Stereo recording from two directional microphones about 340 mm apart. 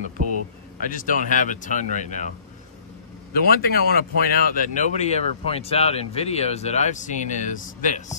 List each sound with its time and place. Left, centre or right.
0.7 s speech: left
3.3 s speech: left